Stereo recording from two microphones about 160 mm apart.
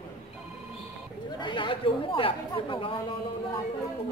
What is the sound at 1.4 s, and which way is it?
Chatter, 30° left (ahead or behind).